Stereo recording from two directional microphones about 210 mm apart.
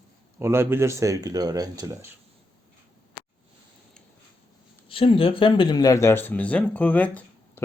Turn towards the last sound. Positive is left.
turn(degrees=10)  # may be behind; listen again after turning